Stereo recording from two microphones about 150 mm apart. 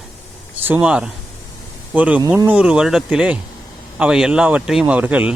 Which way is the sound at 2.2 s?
25° right (ahead or behind).